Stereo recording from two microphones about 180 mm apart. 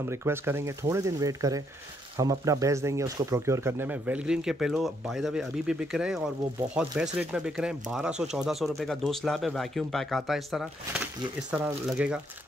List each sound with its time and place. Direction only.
0.0 s speech: 15° right (ahead or behind)